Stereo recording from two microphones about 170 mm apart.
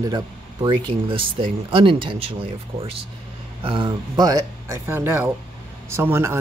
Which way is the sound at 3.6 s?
30° right (ahead or behind).